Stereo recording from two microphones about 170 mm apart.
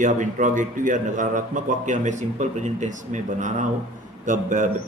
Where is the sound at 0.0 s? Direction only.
50° right (ahead or behind).